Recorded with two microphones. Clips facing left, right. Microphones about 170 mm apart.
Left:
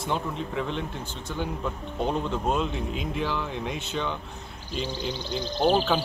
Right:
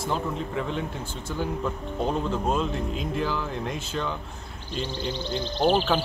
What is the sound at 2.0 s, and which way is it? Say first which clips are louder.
Speech: right 1 dB; centre (ahead or behind).